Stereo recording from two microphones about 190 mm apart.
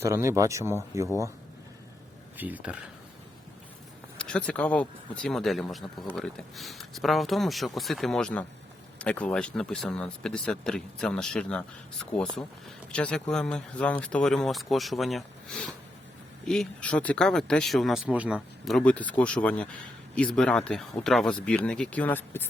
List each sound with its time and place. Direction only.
0.0 s speech: 15° right (ahead or behind)
2.4 s speech: 10° right (ahead or behind)
4.2 s speech: 5° left (ahead or behind)